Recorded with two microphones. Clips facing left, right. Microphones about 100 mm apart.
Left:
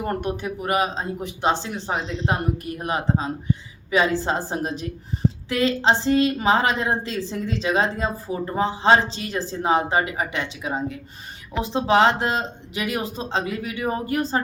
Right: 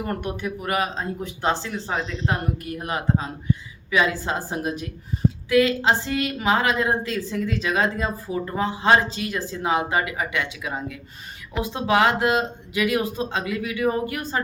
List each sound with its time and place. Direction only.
0.0 s a woman's voice: 30° left (ahead or behind)